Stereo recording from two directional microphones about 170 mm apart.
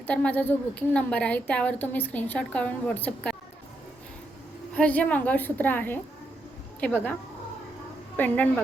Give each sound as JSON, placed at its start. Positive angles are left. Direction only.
{"t": 0.1, "sound": "a woman's voice", "side_deg": 10}
{"t": 4.7, "sound": "a woman's voice", "side_deg": 10}
{"t": 8.1, "sound": "a woman's voice", "side_deg": 10}